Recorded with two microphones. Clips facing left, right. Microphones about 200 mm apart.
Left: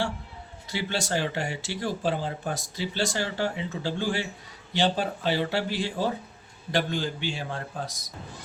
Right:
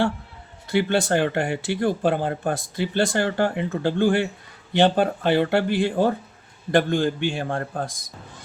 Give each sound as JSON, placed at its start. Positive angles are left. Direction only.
{"t": 0.7, "sound": "a man's voice", "side_deg": -55}